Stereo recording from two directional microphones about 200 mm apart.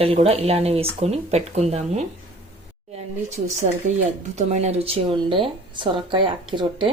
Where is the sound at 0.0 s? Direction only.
30° right (ahead or behind).